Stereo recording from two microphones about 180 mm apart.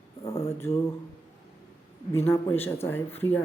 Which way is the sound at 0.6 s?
15° left (ahead or behind).